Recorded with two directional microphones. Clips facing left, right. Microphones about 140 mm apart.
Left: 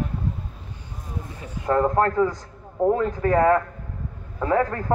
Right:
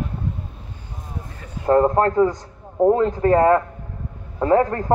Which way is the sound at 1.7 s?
30° right (ahead or behind).